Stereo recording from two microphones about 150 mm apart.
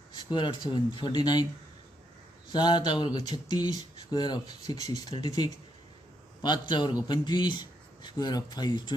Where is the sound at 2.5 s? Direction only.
30° left (ahead or behind).